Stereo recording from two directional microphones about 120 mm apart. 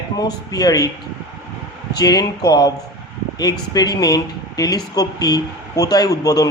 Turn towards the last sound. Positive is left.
turn(degrees=30)  # may be behind; listen again after turning